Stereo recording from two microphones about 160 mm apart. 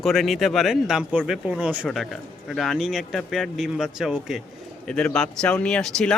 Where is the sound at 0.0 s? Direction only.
Centre (ahead or behind).